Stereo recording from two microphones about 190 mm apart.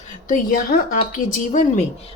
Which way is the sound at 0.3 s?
45° left (ahead or behind).